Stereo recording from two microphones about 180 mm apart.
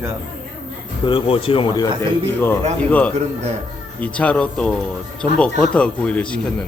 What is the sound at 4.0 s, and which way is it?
A man's voice, 10° left (ahead or behind).